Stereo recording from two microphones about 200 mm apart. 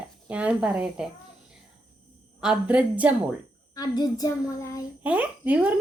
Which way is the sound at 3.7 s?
20° left (ahead or behind).